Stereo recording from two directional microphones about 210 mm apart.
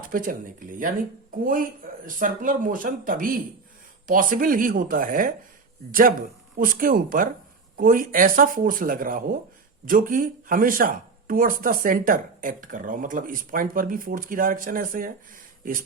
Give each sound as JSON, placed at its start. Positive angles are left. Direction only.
{"t": 0.0, "sound": "speech", "side_deg": -40}
{"t": 2.0, "sound": "speech", "side_deg": -40}